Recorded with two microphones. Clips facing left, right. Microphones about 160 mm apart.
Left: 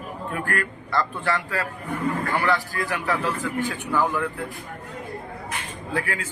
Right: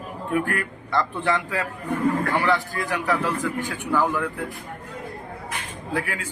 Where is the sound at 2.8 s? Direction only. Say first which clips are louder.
Right 1 dB; 15° right (ahead or behind).